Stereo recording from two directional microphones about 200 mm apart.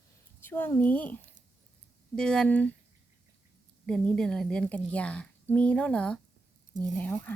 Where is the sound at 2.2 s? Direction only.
5° left (ahead or behind).